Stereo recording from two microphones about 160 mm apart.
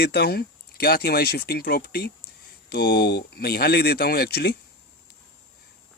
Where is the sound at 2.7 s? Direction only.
90° left.